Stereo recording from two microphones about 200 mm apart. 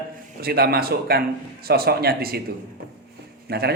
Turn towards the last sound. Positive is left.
turn(degrees=-55)  # may be behind; listen again after turning